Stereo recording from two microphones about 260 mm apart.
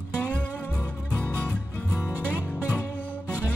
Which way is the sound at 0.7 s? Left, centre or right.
Centre.